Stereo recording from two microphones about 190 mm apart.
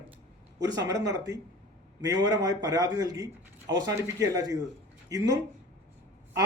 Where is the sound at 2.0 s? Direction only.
20° right (ahead or behind).